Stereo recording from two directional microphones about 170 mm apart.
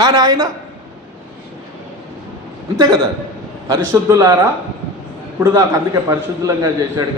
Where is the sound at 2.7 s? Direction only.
20° right (ahead or behind).